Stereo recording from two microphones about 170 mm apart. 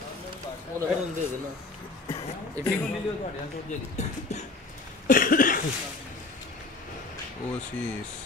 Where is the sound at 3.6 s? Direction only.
45° left (ahead or behind).